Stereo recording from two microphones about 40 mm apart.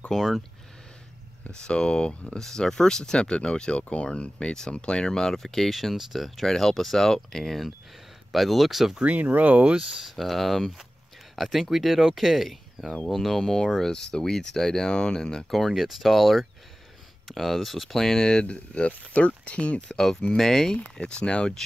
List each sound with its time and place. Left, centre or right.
0.1 s speech: centre
1.5 s speech: left
3.2 s speech: left
5.3 s speech: centre
9.0 s speech: right
10.0 s speech: centre
15.7 s speech: centre
17.9 s speech: centre
18.9 s speech: left
19.9 s speech: centre
20.7 s speech: left